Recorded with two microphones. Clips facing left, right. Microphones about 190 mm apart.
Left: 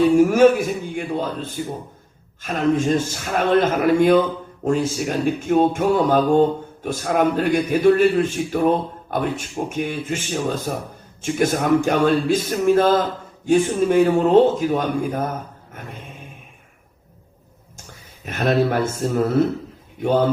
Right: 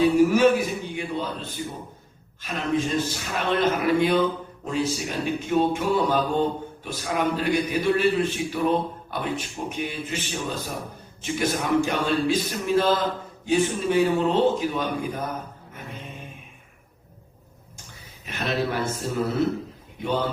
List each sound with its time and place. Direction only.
0.2 s a man's voice: 50° left (ahead or behind)
18.3 s a man's voice: 50° left (ahead or behind)